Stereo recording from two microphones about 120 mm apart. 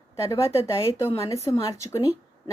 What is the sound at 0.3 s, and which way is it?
Speech, 25° left (ahead or behind).